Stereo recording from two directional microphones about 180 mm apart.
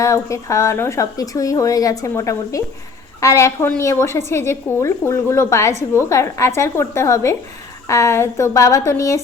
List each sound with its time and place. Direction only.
0.0 s a woman's voice: 15° left (ahead or behind)